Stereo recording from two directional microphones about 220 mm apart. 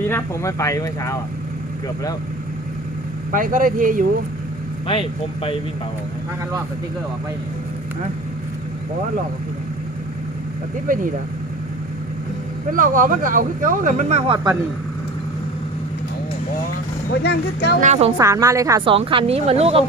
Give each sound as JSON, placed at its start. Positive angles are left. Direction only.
{"t": 0.1, "sound": "speech", "side_deg": 15}
{"t": 3.3, "sound": "speech", "side_deg": -40}
{"t": 4.9, "sound": "speech", "side_deg": 25}
{"t": 10.8, "sound": "speech", "side_deg": -40}
{"t": 12.7, "sound": "speech", "side_deg": -35}
{"t": 17.1, "sound": "speech", "side_deg": 50}
{"t": 17.7, "sound": "speech", "side_deg": -30}
{"t": 18.2, "sound": "speech", "side_deg": -15}
{"t": 18.9, "sound": "speech", "side_deg": -25}